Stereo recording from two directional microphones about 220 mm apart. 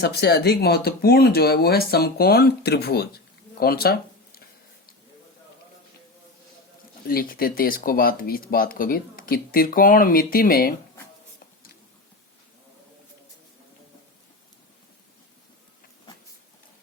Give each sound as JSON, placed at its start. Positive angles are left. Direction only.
{"t": 0.0, "sound": "speech", "side_deg": 50}
{"t": 3.6, "sound": "a sound", "side_deg": 45}
{"t": 7.1, "sound": "speech", "side_deg": 40}